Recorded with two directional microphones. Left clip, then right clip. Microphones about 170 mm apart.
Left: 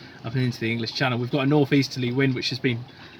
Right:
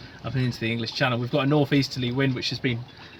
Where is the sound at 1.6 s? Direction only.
90° right.